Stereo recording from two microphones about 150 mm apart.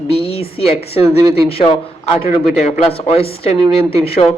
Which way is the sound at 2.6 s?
45° left (ahead or behind).